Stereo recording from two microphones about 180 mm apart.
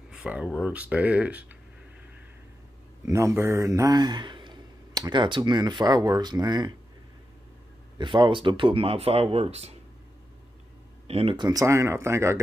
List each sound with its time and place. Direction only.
0.1 s speech: 5° right (ahead or behind)
3.1 s speech: 15° right (ahead or behind)
8.0 s speech: 25° right (ahead or behind)
11.1 s speech: 30° right (ahead or behind); by 12.4 s 15° right (ahead or behind)